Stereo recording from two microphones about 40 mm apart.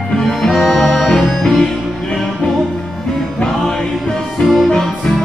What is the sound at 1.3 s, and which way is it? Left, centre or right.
Music, centre.